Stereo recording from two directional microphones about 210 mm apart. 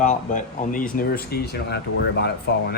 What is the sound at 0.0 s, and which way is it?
Speech, 35° left (ahead or behind).